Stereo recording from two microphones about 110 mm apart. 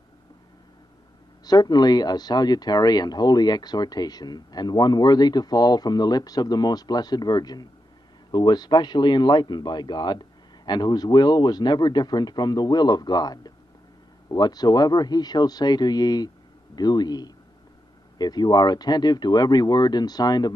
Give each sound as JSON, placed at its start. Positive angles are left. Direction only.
{"t": 1.4, "sound": "speech", "side_deg": 35}